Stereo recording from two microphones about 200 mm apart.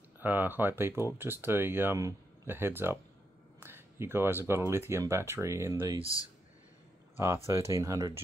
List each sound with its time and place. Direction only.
0.2 s speech: 10° right (ahead or behind)
5.9 s speech: 25° right (ahead or behind)
7.7 s speech: 15° right (ahead or behind)